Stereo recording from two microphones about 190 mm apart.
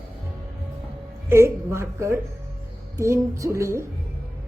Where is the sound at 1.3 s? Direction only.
15° right (ahead or behind).